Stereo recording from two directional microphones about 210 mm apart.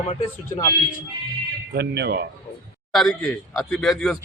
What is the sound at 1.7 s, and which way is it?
Speech, 50° right (ahead or behind).